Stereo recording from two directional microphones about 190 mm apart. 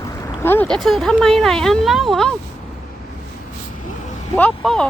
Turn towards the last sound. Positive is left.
turn(degrees=5)  # may be behind; listen again after turning